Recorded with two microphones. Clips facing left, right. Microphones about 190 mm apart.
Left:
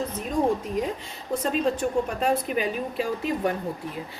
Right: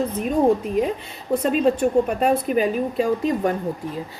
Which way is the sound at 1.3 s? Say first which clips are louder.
Right 6 dB; 60° right (ahead or behind).